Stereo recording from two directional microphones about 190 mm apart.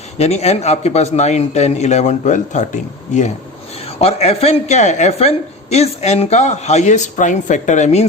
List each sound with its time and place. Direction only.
0.2 s a man's voice: 35° left (ahead or behind)